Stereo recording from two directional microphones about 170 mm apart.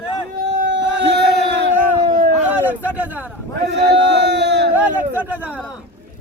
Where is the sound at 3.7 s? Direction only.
80° right.